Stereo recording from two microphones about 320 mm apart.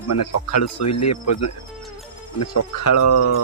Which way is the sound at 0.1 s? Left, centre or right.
Left.